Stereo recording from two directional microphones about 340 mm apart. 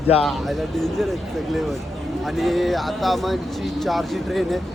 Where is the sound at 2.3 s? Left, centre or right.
Centre.